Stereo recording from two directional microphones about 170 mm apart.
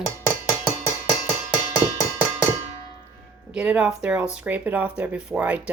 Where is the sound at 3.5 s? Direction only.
5° right (ahead or behind).